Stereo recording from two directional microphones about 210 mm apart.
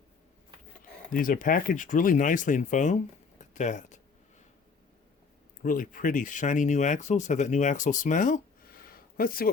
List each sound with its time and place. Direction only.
1.1 s speech: 40° left (ahead or behind)
5.6 s speech: 40° left (ahead or behind)